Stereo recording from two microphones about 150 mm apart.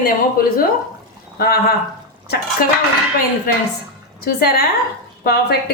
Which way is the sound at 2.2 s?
90° left.